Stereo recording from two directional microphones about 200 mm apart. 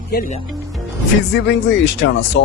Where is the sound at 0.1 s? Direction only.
45° left (ahead or behind).